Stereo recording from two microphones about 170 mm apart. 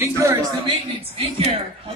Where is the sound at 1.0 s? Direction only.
35° right (ahead or behind).